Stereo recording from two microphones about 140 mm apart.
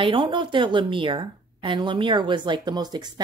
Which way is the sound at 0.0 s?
40° right (ahead or behind).